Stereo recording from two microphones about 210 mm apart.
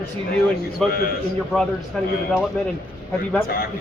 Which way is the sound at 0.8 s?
Centre (ahead or behind).